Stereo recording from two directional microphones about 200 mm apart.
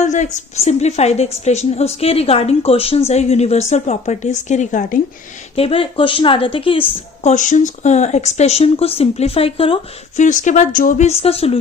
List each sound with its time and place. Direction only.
0.0 s a woman's voice: 35° left (ahead or behind)
5.5 s a woman's voice: 30° left (ahead or behind)
10.2 s a woman's voice: 40° left (ahead or behind)